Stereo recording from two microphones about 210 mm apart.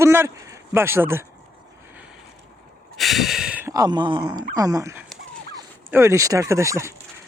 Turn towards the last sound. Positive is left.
turn(degrees=-15)  # may be behind; listen again after turning